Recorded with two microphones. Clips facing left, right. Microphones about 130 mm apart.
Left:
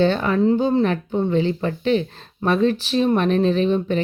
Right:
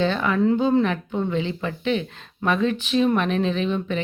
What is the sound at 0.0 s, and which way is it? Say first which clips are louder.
Speech: left 3 dB; 35° left (ahead or behind).